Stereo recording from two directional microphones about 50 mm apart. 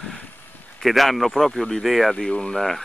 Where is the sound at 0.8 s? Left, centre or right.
Centre.